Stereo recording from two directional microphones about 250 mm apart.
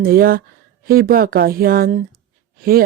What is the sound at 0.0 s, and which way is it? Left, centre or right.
Speech, right.